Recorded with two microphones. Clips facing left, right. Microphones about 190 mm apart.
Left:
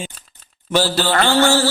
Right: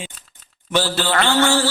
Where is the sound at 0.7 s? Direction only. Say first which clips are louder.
Left 2 dB; 40° left (ahead or behind).